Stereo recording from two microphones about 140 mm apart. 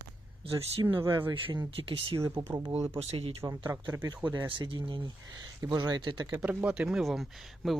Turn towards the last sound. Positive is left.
turn(degrees=0)  # may be behind; listen again after turning